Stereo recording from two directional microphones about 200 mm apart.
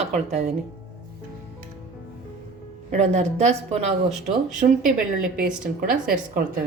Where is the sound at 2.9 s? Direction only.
35° right (ahead or behind).